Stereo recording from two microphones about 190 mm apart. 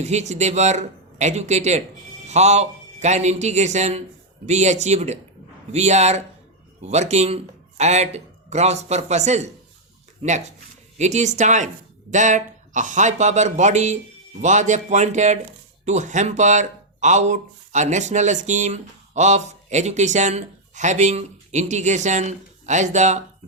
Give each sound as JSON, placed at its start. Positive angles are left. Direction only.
{"t": 0.0, "sound": "a man's voice", "side_deg": -35}